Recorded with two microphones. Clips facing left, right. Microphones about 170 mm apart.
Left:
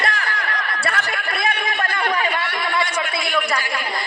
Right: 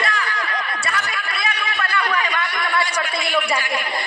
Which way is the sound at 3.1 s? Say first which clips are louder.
Right 1 dB; centre (ahead or behind).